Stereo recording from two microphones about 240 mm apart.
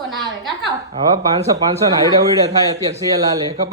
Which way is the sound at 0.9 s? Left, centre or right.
Centre.